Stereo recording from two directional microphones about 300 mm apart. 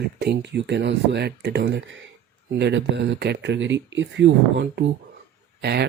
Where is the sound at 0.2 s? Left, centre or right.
Right.